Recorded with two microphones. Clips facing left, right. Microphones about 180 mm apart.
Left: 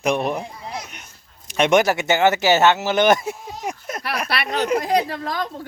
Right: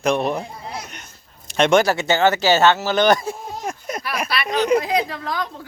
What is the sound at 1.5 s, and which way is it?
Speech, 10° left (ahead or behind).